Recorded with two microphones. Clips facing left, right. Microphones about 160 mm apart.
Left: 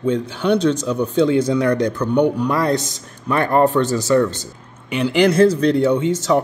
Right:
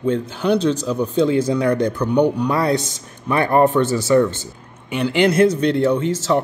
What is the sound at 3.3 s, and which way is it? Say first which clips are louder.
Speech: even; 10° right (ahead or behind).